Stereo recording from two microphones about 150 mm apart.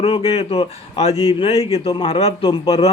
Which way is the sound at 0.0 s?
40° left (ahead or behind).